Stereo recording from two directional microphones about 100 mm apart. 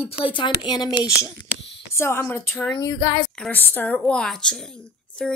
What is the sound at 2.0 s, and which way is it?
Speech, 25° left (ahead or behind).